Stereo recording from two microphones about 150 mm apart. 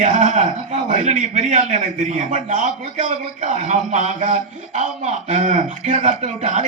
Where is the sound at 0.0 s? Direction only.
55° right (ahead or behind).